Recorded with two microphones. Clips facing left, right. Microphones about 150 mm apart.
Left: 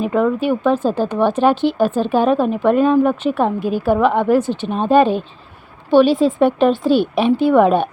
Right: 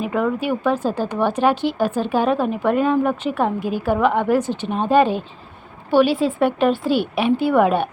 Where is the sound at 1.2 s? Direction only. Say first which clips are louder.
Left 3 dB; 10° right (ahead or behind).